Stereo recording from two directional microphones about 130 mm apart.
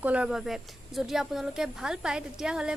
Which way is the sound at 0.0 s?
10° right (ahead or behind).